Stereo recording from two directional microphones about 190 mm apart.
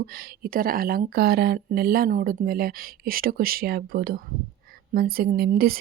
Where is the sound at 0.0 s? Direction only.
55° right (ahead or behind).